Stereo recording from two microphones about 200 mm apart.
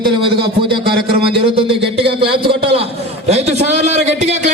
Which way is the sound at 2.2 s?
25° right (ahead or behind).